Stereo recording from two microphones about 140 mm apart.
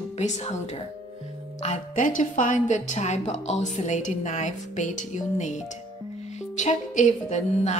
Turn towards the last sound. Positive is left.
turn(degrees=60)  # may be behind; listen again after turning